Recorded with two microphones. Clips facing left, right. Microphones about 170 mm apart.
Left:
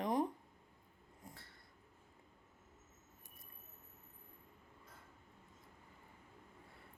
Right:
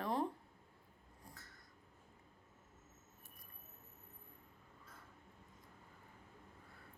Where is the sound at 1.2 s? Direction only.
30° left (ahead or behind).